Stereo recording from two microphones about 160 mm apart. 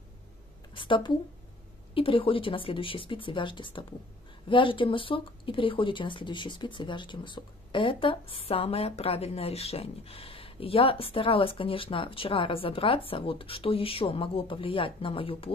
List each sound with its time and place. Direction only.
0.7 s speech: 30° left (ahead or behind)